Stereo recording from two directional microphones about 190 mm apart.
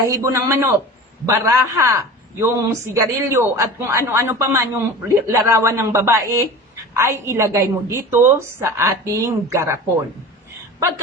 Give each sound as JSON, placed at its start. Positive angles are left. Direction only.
{"t": 0.0, "sound": "a man's voice", "side_deg": -15}